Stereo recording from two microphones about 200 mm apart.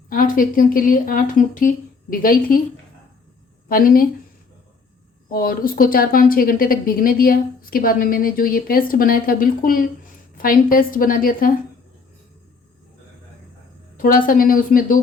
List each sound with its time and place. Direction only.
0.1 s speech: 45° left (ahead or behind)
3.7 s speech: 45° left (ahead or behind)
5.3 s speech: 45° left (ahead or behind)
13.9 s speech: 45° left (ahead or behind)